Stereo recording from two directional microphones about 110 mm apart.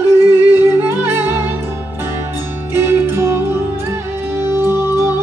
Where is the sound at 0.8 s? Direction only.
20° right (ahead or behind).